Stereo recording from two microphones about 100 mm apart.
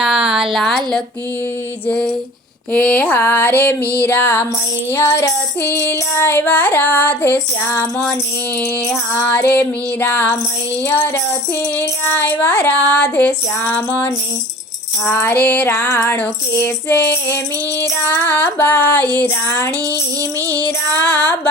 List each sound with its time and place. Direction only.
0.0 s a sound: 5° right (ahead or behind)
1.9 s music: 10° left (ahead or behind)
2.7 s child singing: 15° left (ahead or behind)
11.8 s music: 20° left (ahead or behind)
15.0 s child singing: 20° left (ahead or behind)
15.7 s child singing: 30° left (ahead or behind)
16.0 s child singing: 15° left (ahead or behind)
20.5 s music: 15° left (ahead or behind)